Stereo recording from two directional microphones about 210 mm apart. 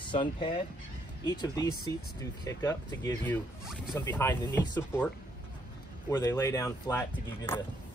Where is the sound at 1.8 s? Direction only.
15° left (ahead or behind).